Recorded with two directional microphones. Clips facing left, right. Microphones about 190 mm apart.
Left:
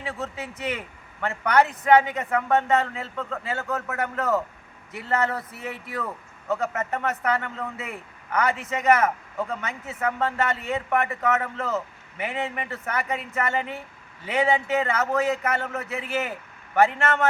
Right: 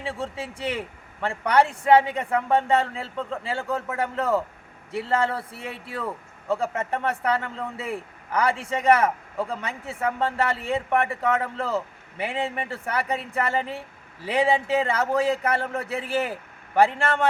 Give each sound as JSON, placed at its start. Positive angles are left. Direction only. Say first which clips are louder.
{"t": 0.0, "sound": "a man's voice", "louder": "right 1 dB", "side_deg": -30}